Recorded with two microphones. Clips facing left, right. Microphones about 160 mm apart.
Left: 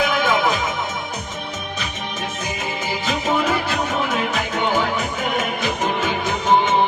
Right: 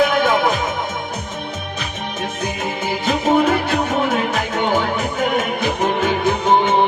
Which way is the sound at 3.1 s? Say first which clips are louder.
Right 6 dB; 50° right (ahead or behind).